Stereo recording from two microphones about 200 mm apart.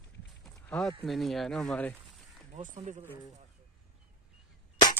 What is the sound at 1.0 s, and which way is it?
Speech, centre (ahead or behind).